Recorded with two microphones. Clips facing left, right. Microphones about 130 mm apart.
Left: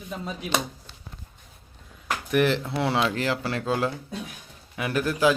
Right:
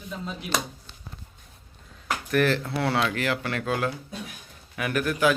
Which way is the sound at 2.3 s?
20° left (ahead or behind).